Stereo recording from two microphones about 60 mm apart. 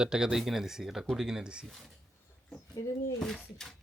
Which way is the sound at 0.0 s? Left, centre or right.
Centre.